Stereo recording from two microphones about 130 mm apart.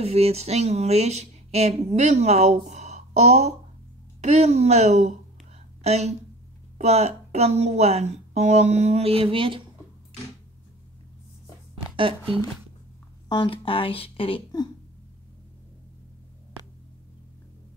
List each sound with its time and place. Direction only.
0.0 s a woman's voice: 50° right (ahead or behind)
11.7 s a sound: 45° right (ahead or behind)
13.3 s speech: 40° left (ahead or behind)